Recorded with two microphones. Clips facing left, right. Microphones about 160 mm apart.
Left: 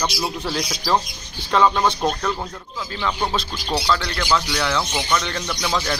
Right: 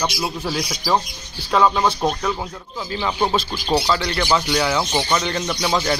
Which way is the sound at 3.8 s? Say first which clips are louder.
Right 1 dB; 10° right (ahead or behind).